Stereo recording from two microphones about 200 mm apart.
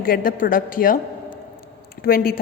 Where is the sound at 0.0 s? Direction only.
45° left (ahead or behind).